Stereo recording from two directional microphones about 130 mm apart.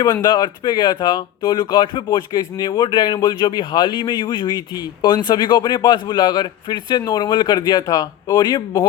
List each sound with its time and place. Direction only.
0.0 s speech: 35° left (ahead or behind)